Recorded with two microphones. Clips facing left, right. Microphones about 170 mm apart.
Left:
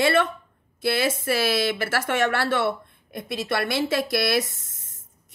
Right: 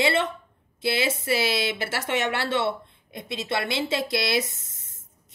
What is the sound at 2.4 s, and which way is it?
Speech, 50° left (ahead or behind).